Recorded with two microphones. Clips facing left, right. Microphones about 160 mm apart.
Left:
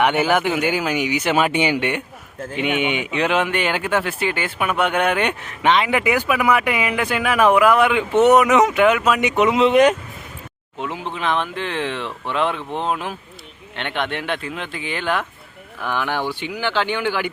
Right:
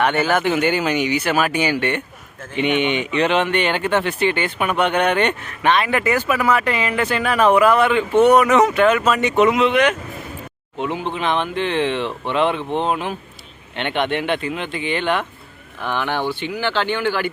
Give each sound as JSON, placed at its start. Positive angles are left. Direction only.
{"t": 0.0, "sound": "speech", "side_deg": 15}
{"t": 2.6, "sound": "speech", "side_deg": 5}
{"t": 9.4, "sound": "speech", "side_deg": 20}
{"t": 9.6, "sound": "speech", "side_deg": 40}
{"t": 10.8, "sound": "speech", "side_deg": 0}